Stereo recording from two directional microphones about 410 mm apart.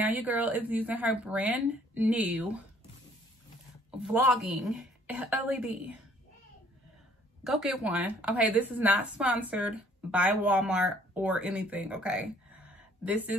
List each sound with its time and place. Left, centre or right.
0.0 s a woman's voice: centre
4.0 s a woman's voice: centre
7.4 s a woman's voice: centre